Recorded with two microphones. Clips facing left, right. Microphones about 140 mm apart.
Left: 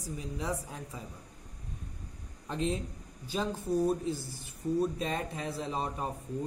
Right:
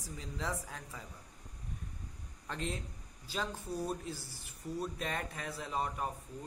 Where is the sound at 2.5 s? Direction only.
20° left (ahead or behind).